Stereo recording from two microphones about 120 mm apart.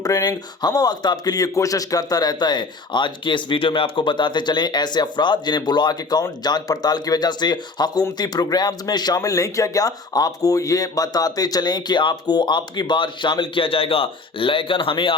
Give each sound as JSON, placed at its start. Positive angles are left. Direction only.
{"t": 0.0, "sound": "speech", "side_deg": 30}